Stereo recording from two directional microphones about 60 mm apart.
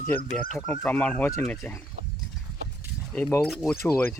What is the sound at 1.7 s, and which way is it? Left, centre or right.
Speech, left.